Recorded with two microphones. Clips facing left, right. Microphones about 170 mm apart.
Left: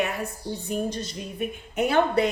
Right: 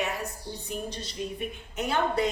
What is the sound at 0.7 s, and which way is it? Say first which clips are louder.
Music: left 7 dB; 45° left (ahead or behind).